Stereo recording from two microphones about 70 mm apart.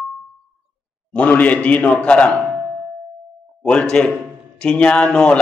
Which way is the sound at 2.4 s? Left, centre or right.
Centre.